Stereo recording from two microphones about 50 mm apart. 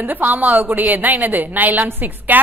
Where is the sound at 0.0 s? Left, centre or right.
Right.